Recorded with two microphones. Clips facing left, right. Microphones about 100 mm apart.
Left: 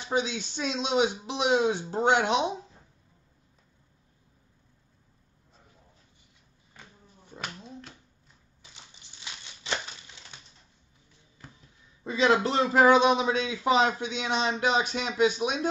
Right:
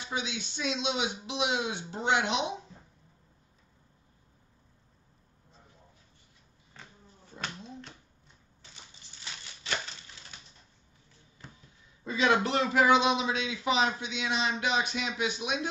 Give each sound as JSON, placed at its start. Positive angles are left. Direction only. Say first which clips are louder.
{"t": 0.1, "sound": "speech", "louder": "left 7 dB", "side_deg": 40}
{"t": 7.3, "sound": "a sound", "louder": "even", "side_deg": 10}
{"t": 9.2, "sound": "crumpling", "louder": "left 1 dB", "side_deg": 20}
{"t": 12.0, "sound": "speech", "louder": "left 3 dB", "side_deg": 30}